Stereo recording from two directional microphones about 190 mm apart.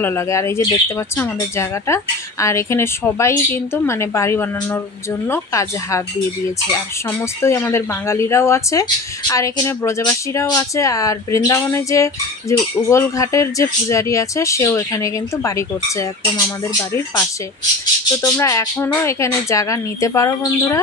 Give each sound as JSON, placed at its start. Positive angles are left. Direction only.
{"t": 0.0, "sound": "speech", "side_deg": 15}
{"t": 7.4, "sound": "speech", "side_deg": 15}